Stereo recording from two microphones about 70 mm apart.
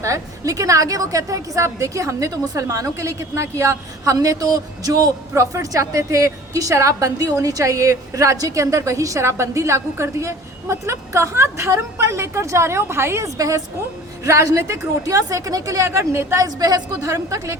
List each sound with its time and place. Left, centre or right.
0.0 s a woman's voice: right
5.3 s a woman's voice: right
16.5 s a woman's voice: right
17.1 s a woman's voice: right